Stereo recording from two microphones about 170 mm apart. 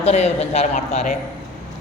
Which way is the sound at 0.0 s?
40° left (ahead or behind).